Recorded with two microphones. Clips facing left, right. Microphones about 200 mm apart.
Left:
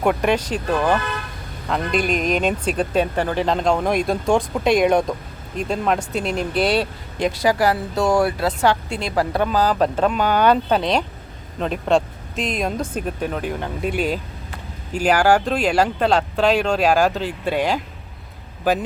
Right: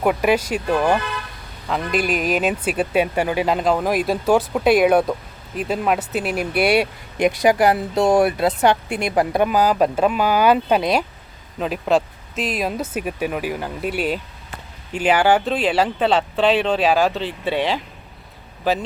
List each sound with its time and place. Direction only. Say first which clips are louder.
0.0 s speech: right 1 dB; 5° right (ahead or behind)
14.9 s speech: left 1 dB; 40° left (ahead or behind)
15.3 s speech: even; 5° right (ahead or behind)